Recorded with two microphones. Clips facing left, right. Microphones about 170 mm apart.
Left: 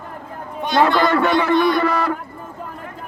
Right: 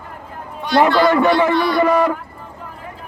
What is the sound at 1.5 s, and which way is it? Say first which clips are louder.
Speech: left 1 dB; 20° left (ahead or behind).